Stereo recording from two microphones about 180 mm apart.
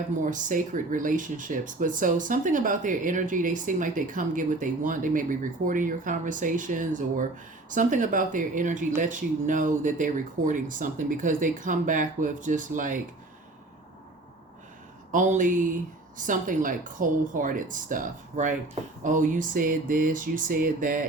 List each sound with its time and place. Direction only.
0.2 s speech: 45° right (ahead or behind)
15.1 s speech: 45° right (ahead or behind)